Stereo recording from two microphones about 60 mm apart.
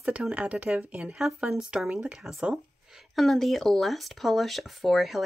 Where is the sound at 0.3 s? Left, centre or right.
Right.